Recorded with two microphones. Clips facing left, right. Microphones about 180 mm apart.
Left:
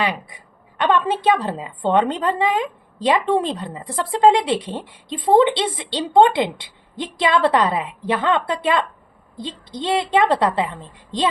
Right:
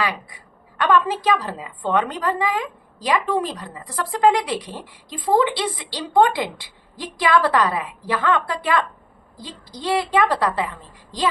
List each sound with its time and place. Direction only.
0.0 s a woman's voice: 20° left (ahead or behind)